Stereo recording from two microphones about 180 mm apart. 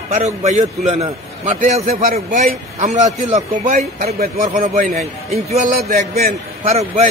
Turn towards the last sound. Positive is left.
turn(degrees=-35)  # may be behind; listen again after turning